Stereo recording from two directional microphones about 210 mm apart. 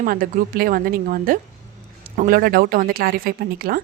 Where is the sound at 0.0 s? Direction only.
40° right (ahead or behind).